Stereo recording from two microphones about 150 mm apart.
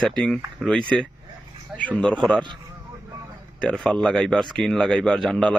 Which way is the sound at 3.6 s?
5° left (ahead or behind).